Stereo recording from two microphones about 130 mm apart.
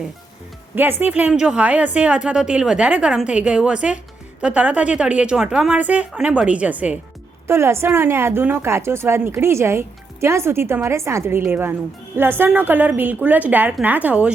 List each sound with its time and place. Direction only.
0.8 s a woman's voice: 15° right (ahead or behind)